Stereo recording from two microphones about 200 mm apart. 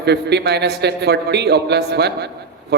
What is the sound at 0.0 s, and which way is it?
A man's voice, 55° right (ahead or behind).